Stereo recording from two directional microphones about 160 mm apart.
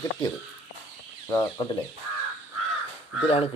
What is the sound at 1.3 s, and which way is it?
Speech, 30° left (ahead or behind).